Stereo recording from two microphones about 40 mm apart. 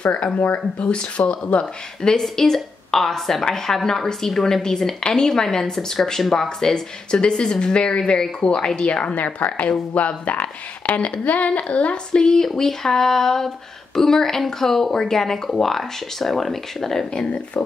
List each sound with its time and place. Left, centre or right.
0.0 s a woman's voice: left
12.1 s a woman's voice: centre